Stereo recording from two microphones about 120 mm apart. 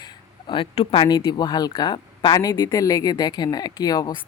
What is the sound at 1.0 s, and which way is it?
Speech, 35° left (ahead or behind).